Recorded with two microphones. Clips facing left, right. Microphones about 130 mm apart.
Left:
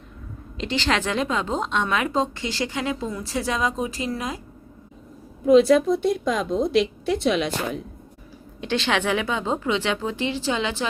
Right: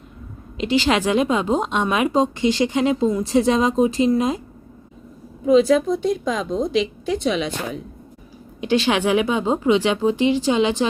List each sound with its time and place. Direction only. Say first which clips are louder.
0.5 s a woman's voice: right 5 dB; 10° right (ahead or behind)
5.5 s a woman's voice: even; centre (ahead or behind)
8.6 s a woman's voice: right 5 dB; 15° right (ahead or behind)